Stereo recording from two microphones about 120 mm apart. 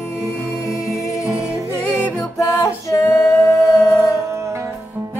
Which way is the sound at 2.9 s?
25° left (ahead or behind).